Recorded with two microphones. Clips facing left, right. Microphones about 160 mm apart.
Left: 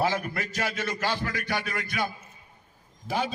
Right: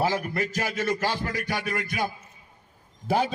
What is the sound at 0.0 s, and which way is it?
Speech, 30° right (ahead or behind).